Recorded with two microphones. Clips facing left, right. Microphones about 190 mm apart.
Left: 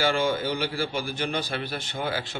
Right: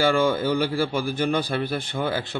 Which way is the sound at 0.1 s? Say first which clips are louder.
Right 4 dB; 50° right (ahead or behind).